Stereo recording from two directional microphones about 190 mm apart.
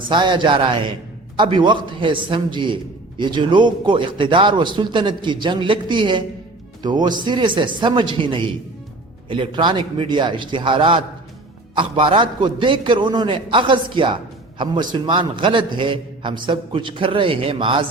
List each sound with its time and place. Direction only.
0.1 s a man's voice: 25° right (ahead or behind)